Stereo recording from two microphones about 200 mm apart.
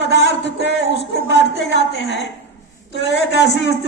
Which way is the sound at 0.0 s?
60° left (ahead or behind).